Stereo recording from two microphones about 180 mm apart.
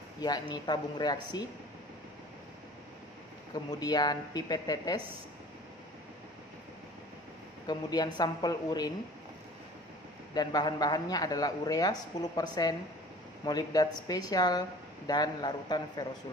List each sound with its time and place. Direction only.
0.2 s speech: 25° left (ahead or behind)
3.5 s speech: 20° left (ahead or behind)
7.6 s speech: 25° left (ahead or behind)
10.3 s speech: 20° left (ahead or behind)